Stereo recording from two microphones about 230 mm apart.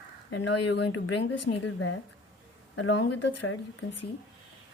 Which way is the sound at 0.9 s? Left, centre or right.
Left.